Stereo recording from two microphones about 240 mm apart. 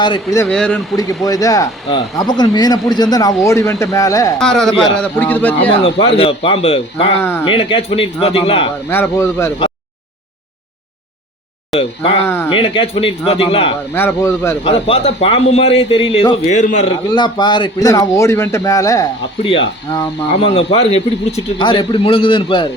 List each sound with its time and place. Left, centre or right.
0.0 s speech: centre
0.4 s a man's voice: centre
0.9 s speech: centre
4.4 s a man's voice: centre
5.8 s a man's voice: left
7.2 s speech: centre
7.4 s a man's voice: left
8.9 s speech: centre
12.2 s speech: centre
12.5 s a man's voice: left
13.9 s a man's voice: centre; by 16.8 s left
17.2 s a man's voice: centre